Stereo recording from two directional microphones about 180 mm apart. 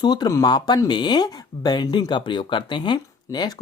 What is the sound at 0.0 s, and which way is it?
Speech, 25° left (ahead or behind).